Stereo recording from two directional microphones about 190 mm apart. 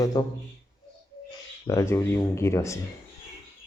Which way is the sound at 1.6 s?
15° left (ahead or behind).